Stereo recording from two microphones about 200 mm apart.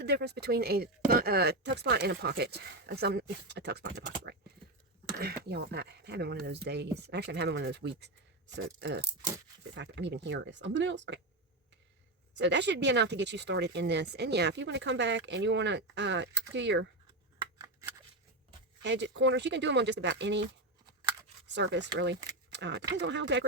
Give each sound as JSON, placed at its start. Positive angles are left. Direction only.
{"t": 0.0, "sound": "speech", "side_deg": -55}
{"t": 12.4, "sound": "speech", "side_deg": -60}
{"t": 17.6, "sound": "scissors", "side_deg": -15}
{"t": 18.8, "sound": "speech", "side_deg": -60}
{"t": 21.4, "sound": "speech", "side_deg": -60}